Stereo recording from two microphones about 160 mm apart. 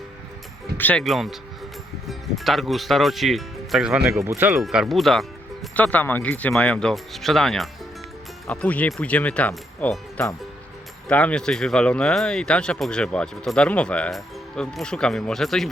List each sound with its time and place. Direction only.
0.8 s speech: 10° left (ahead or behind)
1.0 s speech: centre (ahead or behind)
4.2 s speech: 15° right (ahead or behind)
4.6 s speech: centre (ahead or behind)
11.1 s speech: 5° left (ahead or behind)